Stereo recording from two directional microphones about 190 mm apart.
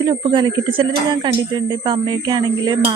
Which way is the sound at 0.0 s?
20° right (ahead or behind).